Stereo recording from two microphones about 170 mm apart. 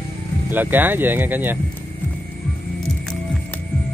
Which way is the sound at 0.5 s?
10° right (ahead or behind).